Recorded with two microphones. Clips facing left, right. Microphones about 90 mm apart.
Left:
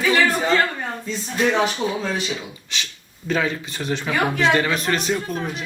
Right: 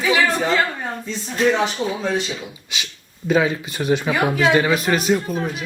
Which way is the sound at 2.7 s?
10° right (ahead or behind).